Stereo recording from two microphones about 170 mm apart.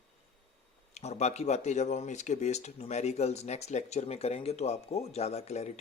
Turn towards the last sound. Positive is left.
turn(degrees=40)  # may be behind; listen again after turning